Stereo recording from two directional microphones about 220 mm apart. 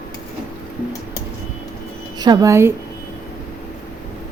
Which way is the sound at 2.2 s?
20° right (ahead or behind).